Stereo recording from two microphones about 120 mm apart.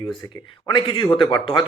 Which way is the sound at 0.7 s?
45° left (ahead or behind).